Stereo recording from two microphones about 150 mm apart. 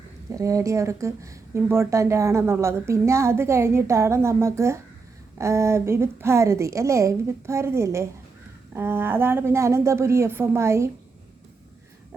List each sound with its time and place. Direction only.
0.3 s a woman's voice: 20° right (ahead or behind)